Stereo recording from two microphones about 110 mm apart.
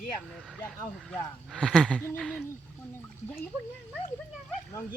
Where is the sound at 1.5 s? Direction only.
5° left (ahead or behind).